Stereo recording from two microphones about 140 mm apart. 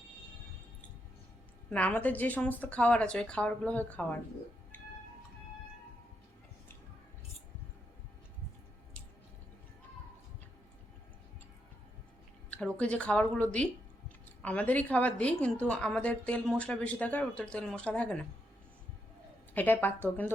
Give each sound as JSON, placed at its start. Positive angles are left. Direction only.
{"t": 1.7, "sound": "a woman's voice", "side_deg": 10}
{"t": 12.5, "sound": "a woman's voice", "side_deg": 10}
{"t": 19.5, "sound": "a woman's voice", "side_deg": 15}